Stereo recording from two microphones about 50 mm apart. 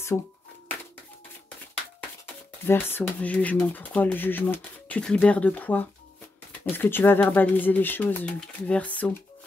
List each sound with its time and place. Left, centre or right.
0.1 s speech: left
2.6 s speech: left
3.2 s speech: left
5.2 s speech: left
6.6 s speech: left
8.4 s speech: left